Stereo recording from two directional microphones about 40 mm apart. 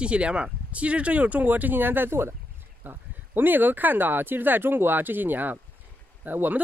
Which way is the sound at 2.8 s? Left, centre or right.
Right.